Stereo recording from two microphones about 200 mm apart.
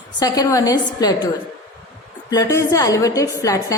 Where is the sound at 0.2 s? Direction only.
20° left (ahead or behind).